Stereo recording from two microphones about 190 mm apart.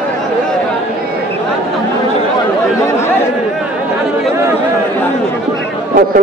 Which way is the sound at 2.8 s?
15° left (ahead or behind).